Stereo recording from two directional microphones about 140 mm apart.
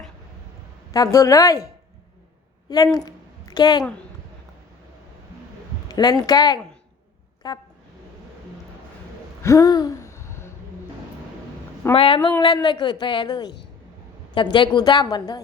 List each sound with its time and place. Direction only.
0.9 s a woman's voice: 25° left (ahead or behind)
2.6 s a woman's voice: 25° left (ahead or behind)
5.9 s a woman's voice: 30° left (ahead or behind)
9.4 s gasp: 20° left (ahead or behind)
11.9 s a woman's voice: 40° left (ahead or behind)